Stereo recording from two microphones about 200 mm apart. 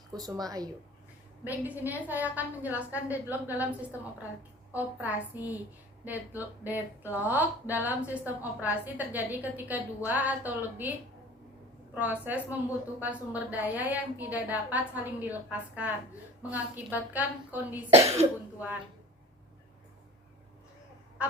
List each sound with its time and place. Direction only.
0.1 s speech: 20° right (ahead or behind)
1.5 s a woman's voice: 10° right (ahead or behind)
11.9 s a woman's voice: 10° right (ahead or behind)